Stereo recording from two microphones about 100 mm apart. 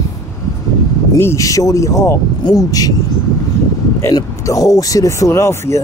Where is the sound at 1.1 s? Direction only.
30° left (ahead or behind).